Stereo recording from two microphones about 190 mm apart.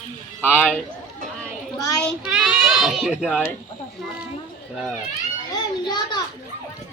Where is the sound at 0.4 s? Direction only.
10° left (ahead or behind).